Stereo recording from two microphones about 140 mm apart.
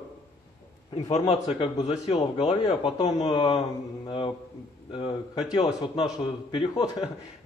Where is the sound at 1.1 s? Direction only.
50° left (ahead or behind).